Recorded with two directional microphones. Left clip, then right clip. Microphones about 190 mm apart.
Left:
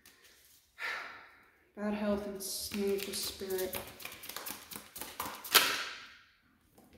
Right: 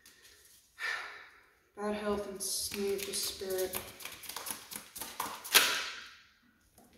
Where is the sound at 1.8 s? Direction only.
30° left (ahead or behind).